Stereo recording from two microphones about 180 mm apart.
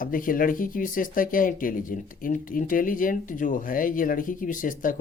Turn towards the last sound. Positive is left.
turn(degrees=50)  # may be behind; listen again after turning